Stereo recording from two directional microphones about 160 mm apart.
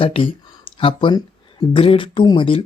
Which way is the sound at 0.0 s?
35° left (ahead or behind).